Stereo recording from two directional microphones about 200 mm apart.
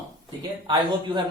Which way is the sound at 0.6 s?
25° right (ahead or behind).